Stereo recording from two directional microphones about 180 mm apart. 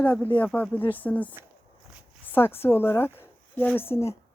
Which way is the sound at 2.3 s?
10° left (ahead or behind).